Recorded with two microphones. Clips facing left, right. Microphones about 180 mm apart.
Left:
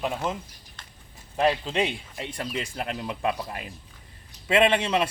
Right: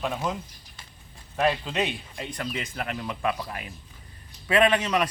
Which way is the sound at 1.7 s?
30° left (ahead or behind).